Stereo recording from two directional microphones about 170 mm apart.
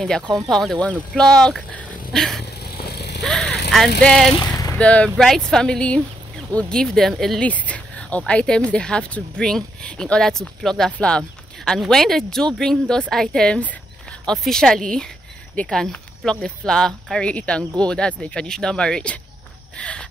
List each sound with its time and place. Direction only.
0.0 s speech: centre (ahead or behind)
2.6 s vehicle: 65° left (ahead or behind)
3.2 s vehicle: 5° left (ahead or behind)
4.0 s speech: 5° left (ahead or behind)
4.4 s a sound: 20° left (ahead or behind)
4.7 s speech: 5° left (ahead or behind)
19.8 s a sound: 5° left (ahead or behind)